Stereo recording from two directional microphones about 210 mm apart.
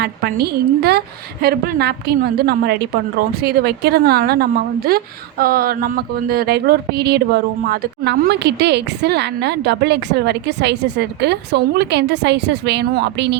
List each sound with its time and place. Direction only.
0.0 s speech: 50° right (ahead or behind)